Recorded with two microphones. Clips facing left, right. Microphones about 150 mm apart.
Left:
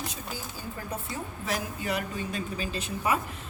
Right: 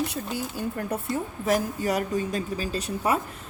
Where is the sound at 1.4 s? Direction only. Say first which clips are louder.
Right 8 dB; 45° right (ahead or behind).